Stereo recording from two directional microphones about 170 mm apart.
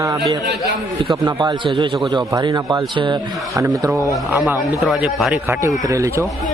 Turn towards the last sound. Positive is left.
turn(degrees=-20)  # may be behind; listen again after turning